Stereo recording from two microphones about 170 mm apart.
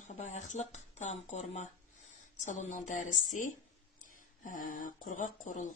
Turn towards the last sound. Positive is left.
turn(degrees=50)  # may be behind; listen again after turning